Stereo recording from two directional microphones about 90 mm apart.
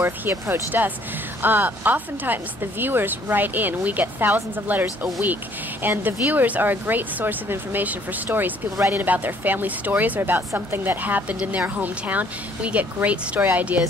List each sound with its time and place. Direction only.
0.0 s a woman's voice: 25° right (ahead or behind)